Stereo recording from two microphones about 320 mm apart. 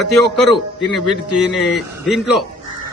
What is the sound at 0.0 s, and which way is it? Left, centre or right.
A man's voice, centre.